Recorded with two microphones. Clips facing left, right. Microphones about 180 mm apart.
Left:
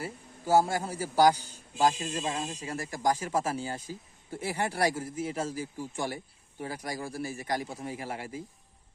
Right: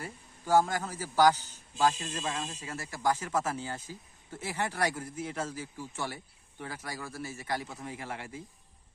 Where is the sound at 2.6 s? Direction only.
35° left (ahead or behind).